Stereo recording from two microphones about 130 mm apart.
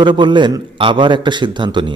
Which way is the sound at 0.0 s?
35° right (ahead or behind).